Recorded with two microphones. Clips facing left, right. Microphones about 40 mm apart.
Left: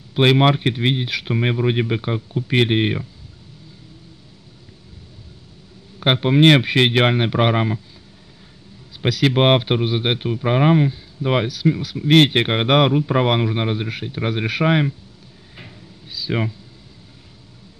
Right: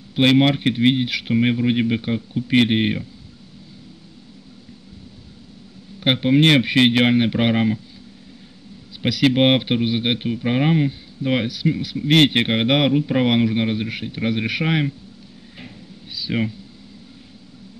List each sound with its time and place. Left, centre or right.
0.1 s speech: centre
6.0 s speech: centre
9.0 s speech: centre
11.2 s speech: left
11.6 s speech: centre
15.5 s a sound: centre
16.3 s speech: centre